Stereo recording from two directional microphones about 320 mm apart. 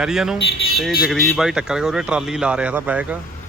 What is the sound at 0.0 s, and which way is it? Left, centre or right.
Speech, centre.